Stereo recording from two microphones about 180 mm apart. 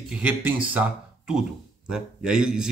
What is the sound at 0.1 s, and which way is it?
A man's voice, 5° right (ahead or behind).